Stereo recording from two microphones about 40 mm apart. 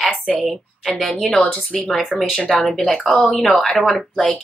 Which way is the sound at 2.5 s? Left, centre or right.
Centre.